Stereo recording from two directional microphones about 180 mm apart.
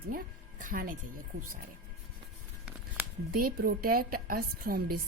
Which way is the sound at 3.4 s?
55° right (ahead or behind).